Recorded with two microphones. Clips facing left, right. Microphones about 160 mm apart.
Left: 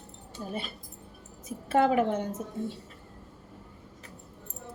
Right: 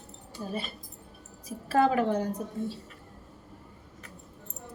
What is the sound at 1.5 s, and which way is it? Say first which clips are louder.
A woman's voice: even; 25° left (ahead or behind).